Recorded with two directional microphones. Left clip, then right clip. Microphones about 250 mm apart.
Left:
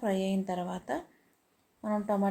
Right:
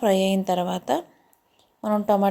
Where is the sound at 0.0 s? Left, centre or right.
Right.